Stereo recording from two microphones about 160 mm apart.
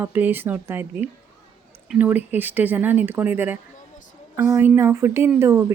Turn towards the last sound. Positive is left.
turn(degrees=-15)  # may be behind; listen again after turning